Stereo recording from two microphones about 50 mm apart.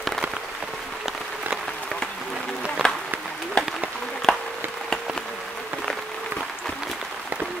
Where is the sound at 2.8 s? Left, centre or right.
Centre.